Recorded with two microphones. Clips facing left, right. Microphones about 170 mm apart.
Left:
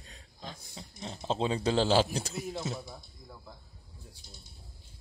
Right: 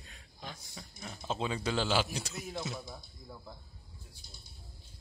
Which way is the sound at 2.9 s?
5° right (ahead or behind).